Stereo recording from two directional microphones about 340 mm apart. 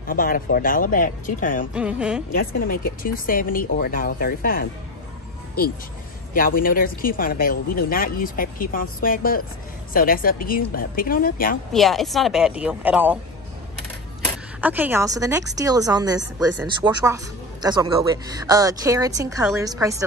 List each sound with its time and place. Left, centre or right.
0.0 s speech: left
1.7 s a woman's voice: centre
2.3 s speech: left
6.3 s speech: left
11.7 s a woman's voice: centre
14.2 s a woman's voice: centre